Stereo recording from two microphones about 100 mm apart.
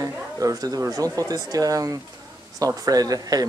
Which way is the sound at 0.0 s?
35° right (ahead or behind).